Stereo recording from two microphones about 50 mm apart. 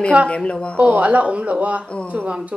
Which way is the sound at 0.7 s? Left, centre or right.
Right.